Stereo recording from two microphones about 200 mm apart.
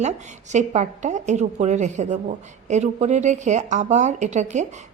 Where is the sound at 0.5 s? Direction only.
35° right (ahead or behind).